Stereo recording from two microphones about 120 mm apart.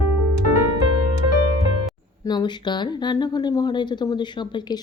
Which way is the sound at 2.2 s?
35° left (ahead or behind).